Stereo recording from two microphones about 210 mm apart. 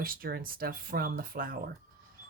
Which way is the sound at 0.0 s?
45° right (ahead or behind).